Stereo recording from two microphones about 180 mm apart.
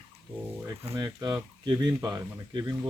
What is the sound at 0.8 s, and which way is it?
Speech, 25° right (ahead or behind).